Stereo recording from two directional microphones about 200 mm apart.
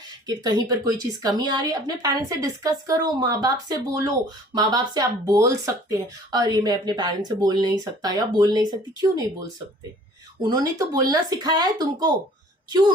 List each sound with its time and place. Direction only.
0.3 s speech: 20° right (ahead or behind)
10.4 s speech: 20° right (ahead or behind)